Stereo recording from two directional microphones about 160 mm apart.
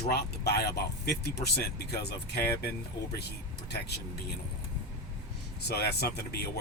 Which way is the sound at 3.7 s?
90° left.